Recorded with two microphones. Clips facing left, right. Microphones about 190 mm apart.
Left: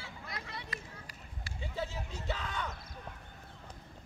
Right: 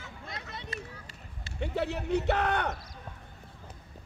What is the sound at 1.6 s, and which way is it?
Speech, 70° right (ahead or behind).